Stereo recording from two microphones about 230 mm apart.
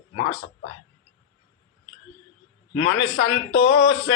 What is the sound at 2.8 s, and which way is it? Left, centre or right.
A man's voice, left.